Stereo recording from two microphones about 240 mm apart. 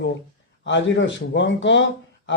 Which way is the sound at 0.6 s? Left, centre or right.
Left.